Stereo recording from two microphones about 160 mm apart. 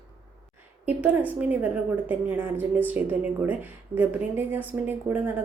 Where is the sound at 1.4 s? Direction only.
10° right (ahead or behind).